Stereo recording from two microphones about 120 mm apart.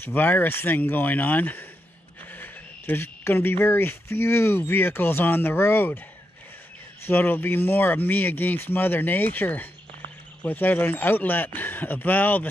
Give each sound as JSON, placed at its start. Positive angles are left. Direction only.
{"t": 0.0, "sound": "speech", "side_deg": 15}
{"t": 7.1, "sound": "speech", "side_deg": 15}